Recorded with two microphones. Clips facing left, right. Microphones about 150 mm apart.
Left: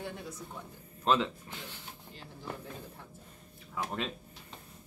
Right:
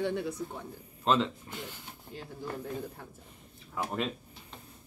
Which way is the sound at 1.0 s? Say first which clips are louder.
Right 1 dB; centre (ahead or behind).